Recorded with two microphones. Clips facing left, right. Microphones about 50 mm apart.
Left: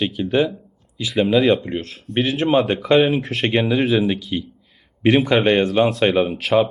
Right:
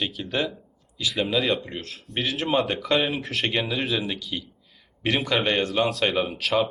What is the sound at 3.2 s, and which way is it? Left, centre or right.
Speech, centre.